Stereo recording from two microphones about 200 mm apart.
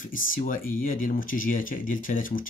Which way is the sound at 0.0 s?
45° left (ahead or behind).